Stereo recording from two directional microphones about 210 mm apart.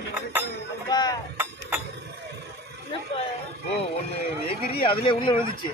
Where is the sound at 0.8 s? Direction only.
20° left (ahead or behind).